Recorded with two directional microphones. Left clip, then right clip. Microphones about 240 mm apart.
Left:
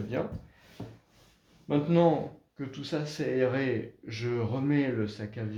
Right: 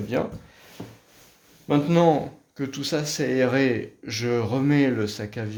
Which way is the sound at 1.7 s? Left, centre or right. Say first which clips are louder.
Right 6 dB; right.